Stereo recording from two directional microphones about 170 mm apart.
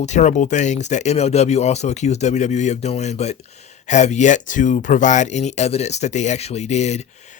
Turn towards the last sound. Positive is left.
turn(degrees=40)  # may be behind; listen again after turning